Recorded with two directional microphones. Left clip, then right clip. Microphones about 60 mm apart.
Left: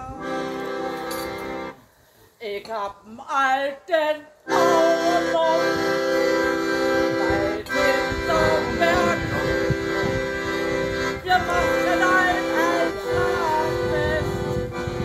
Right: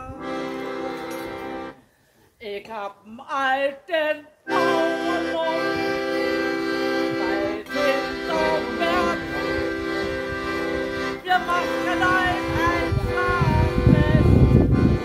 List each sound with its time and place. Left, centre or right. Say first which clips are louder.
0.2 s music: left 1 dB; left
2.7 s a woman's voice: left 3 dB; centre
4.5 s music: left 3 dB; left
11.2 s music: left 1 dB; left
11.5 s music: left 3 dB; left